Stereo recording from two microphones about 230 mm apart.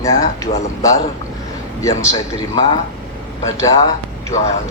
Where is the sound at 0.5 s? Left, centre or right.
Left.